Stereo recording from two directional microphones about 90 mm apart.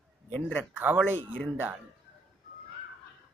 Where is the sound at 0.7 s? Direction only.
20° right (ahead or behind).